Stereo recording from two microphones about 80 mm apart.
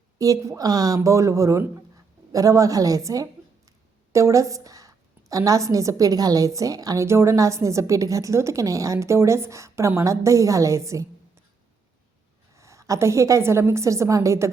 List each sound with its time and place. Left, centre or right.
0.2 s a woman's voice: right
3.7 s a sound: right
5.5 s a woman's voice: right
7.0 s a woman's voice: right
12.5 s a woman's voice: right